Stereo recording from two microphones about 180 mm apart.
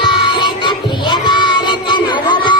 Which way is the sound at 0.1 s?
25° left (ahead or behind).